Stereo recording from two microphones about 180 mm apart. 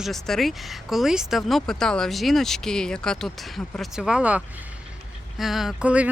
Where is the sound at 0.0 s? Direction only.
Centre (ahead or behind).